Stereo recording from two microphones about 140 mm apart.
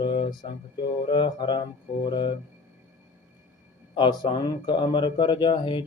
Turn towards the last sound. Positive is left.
turn(degrees=35)  # may be behind; listen again after turning